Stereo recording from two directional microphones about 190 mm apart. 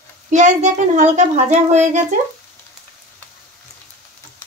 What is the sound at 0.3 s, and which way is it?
Speech, 40° right (ahead or behind).